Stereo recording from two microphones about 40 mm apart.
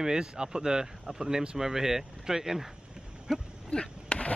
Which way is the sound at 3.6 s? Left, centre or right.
Left.